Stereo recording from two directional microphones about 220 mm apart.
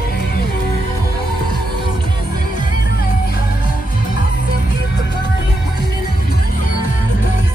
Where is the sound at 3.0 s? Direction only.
40° left (ahead or behind).